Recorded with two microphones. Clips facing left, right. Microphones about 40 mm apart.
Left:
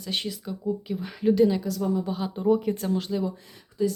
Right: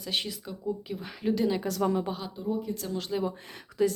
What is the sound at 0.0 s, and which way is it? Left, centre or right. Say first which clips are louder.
Speech: left 2 dB; centre.